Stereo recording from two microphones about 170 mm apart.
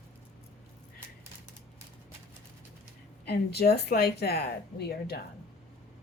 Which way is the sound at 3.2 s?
70° left (ahead or behind).